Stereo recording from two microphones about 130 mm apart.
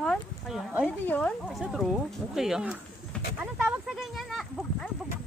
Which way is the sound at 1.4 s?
Centre (ahead or behind).